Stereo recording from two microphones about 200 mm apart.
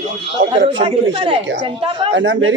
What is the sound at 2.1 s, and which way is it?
Speech, 70° right (ahead or behind).